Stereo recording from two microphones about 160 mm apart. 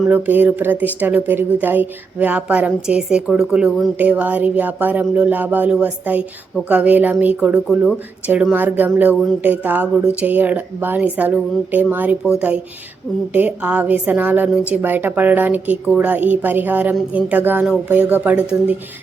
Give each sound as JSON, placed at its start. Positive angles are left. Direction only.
{"t": 0.1, "sound": "speech", "side_deg": -10}